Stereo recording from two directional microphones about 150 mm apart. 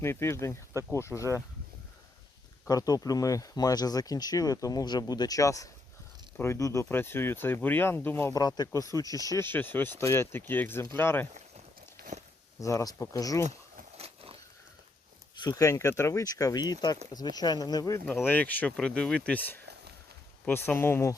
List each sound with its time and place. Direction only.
0.0 s speech: 15° left (ahead or behind)
2.6 s speech: 25° left (ahead or behind)
12.1 s speech: 50° right (ahead or behind)
12.5 s speech: 20° left (ahead or behind)
13.9 s vehicle: 40° right (ahead or behind)
15.4 s speech: 25° left (ahead or behind)
18.0 s speech: 10° left (ahead or behind)